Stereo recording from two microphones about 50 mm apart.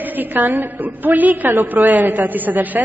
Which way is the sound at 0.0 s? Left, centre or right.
Right.